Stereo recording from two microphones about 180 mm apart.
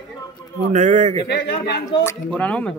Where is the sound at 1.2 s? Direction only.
65° left (ahead or behind).